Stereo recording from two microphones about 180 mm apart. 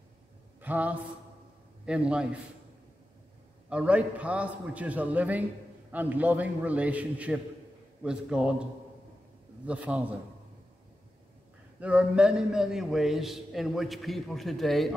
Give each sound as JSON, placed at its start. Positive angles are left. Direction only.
{"t": 0.6, "sound": "a man's voice", "side_deg": -10}
{"t": 3.6, "sound": "a man's voice", "side_deg": -5}
{"t": 9.7, "sound": "a man's voice", "side_deg": -5}
{"t": 11.8, "sound": "a man's voice", "side_deg": -5}